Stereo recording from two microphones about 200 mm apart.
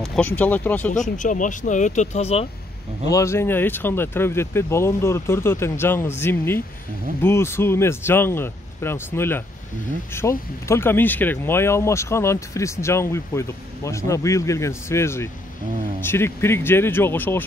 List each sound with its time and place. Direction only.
0.0 s speech: 5° left (ahead or behind)
0.9 s speech: 40° left (ahead or behind)
3.1 s speech: 15° left (ahead or behind)